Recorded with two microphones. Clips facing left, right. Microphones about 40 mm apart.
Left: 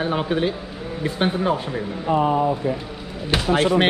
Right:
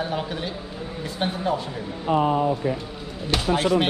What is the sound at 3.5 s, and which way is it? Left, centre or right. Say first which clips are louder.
Speech: left 4 dB; left.